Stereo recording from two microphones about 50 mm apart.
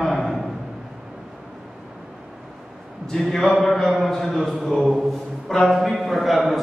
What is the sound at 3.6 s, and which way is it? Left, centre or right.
A man's voice, centre.